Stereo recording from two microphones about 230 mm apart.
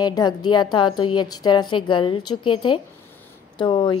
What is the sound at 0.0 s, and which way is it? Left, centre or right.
A woman's voice, centre.